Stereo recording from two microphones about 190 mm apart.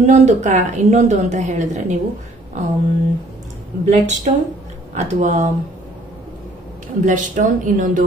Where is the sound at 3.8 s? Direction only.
35° right (ahead or behind).